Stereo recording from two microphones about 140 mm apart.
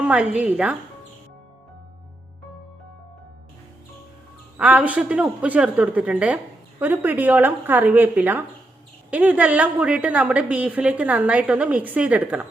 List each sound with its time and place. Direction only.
0.0 s speech: 10° right (ahead or behind)
4.5 s speech: 10° right (ahead or behind)